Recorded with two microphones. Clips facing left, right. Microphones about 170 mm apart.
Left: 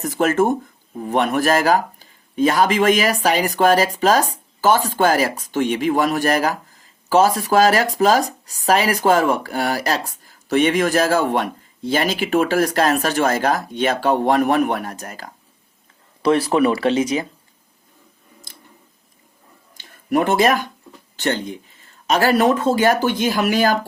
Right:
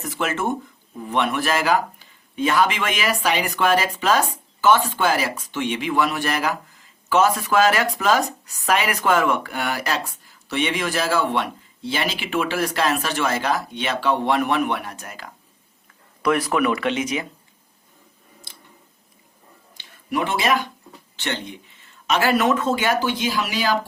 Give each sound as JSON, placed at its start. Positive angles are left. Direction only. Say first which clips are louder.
{"t": 0.0, "sound": "speech", "louder": "left 7 dB", "side_deg": 40}
{"t": 16.2, "sound": "speech", "louder": "left 4 dB", "side_deg": 30}
{"t": 18.5, "sound": "tick-tock", "louder": "left 2 dB", "side_deg": 40}
{"t": 19.7, "sound": "a sound", "louder": "left 6 dB", "side_deg": 45}
{"t": 21.2, "sound": "speech", "louder": "left 7 dB", "side_deg": 40}